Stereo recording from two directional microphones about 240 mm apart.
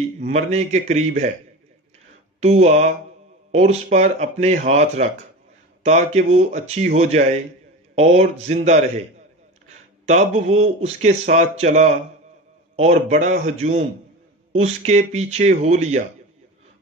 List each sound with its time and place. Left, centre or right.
0.2 s speech: right
2.4 s speech: right
10.0 s speech: right